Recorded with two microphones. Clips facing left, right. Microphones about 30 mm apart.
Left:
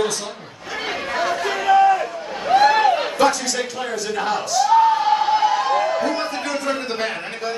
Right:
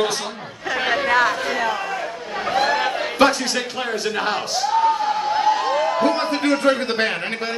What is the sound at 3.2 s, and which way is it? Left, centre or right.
Speech, right.